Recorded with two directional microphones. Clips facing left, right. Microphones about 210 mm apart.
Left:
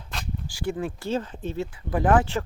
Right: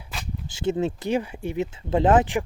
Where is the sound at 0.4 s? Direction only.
20° right (ahead or behind).